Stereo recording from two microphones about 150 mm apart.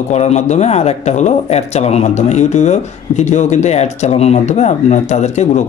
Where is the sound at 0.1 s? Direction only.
50° left (ahead or behind).